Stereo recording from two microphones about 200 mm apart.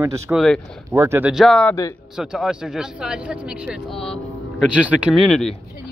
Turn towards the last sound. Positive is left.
turn(degrees=0)  # may be behind; listen again after turning